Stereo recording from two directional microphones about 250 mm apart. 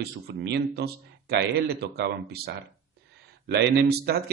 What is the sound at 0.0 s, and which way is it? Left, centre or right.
A man's voice, right.